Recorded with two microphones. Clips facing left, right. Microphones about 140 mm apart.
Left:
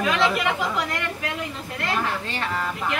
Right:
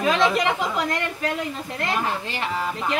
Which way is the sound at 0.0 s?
20° right (ahead or behind).